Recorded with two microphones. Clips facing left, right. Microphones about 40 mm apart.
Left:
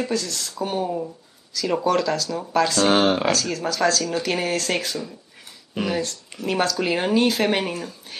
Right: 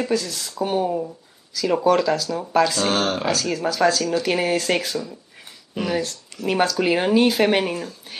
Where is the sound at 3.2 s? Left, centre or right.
Centre.